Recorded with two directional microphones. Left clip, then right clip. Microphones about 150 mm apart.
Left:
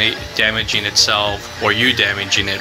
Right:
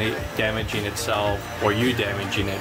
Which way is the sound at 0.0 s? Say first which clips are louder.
Left 8 dB; 5° right (ahead or behind).